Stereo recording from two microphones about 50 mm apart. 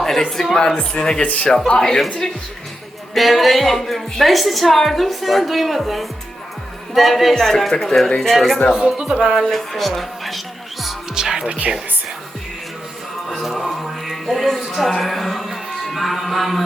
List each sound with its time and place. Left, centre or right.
0.0 s speech: centre
0.8 s speech: centre
3.2 s a woman's voice: centre
8.7 s speech: centre
9.4 s a woman's voice: centre
11.1 s music: centre
13.2 s music: centre